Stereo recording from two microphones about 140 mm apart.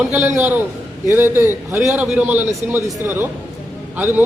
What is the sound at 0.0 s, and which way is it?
A man's voice, 15° right (ahead or behind).